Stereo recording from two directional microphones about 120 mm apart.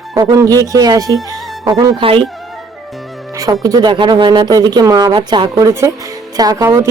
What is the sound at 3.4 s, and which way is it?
Speech, 30° right (ahead or behind).